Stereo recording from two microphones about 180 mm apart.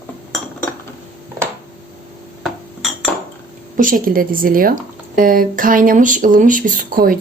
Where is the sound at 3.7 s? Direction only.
50° right (ahead or behind).